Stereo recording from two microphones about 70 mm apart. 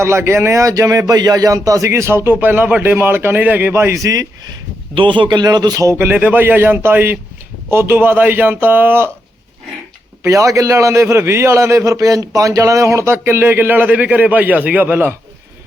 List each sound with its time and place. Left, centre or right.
0.0 s a man's voice: right
1.9 s a man's voice: right
3.9 s speech: right
5.3 s speech: right
6.0 s a man's voice: right
10.2 s a man's voice: right